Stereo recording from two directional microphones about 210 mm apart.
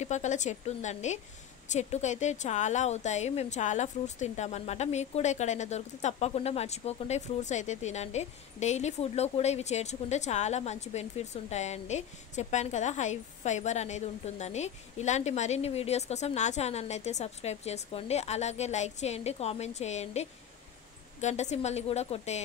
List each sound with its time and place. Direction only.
0.0 s speech: 35° left (ahead or behind)